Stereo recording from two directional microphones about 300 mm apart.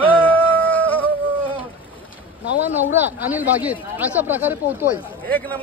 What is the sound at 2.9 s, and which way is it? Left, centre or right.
Speech, centre.